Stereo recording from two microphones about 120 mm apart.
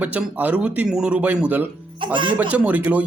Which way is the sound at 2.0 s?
45° right (ahead or behind).